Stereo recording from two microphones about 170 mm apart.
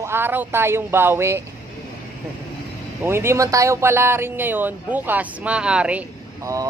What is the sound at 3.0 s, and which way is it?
Speech, 15° right (ahead or behind).